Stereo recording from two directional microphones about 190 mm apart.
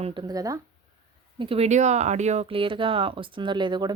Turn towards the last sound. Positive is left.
turn(degrees=-25)  # may be behind; listen again after turning